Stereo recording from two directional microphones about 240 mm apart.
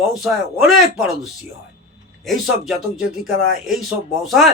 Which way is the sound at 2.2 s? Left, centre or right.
Centre.